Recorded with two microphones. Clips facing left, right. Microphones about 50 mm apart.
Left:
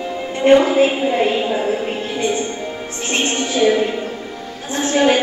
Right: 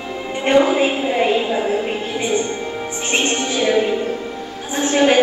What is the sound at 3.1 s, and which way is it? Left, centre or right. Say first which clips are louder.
Music: even; centre.